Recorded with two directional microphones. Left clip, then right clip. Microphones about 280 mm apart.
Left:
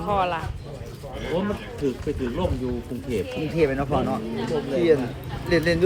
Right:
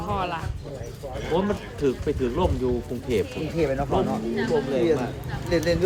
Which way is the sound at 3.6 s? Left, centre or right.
Left.